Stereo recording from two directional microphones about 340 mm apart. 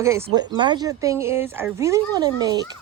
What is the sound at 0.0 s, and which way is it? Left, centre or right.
Speech, centre.